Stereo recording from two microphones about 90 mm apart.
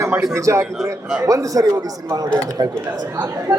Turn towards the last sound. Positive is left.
turn(degrees=-45)  # may be behind; listen again after turning